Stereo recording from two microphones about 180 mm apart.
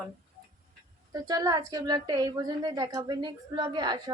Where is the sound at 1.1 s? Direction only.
20° right (ahead or behind).